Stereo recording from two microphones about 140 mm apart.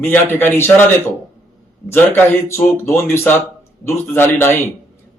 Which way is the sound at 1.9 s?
15° left (ahead or behind).